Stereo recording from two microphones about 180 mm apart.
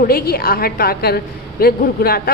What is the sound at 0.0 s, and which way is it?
A woman's voice, 60° left (ahead or behind).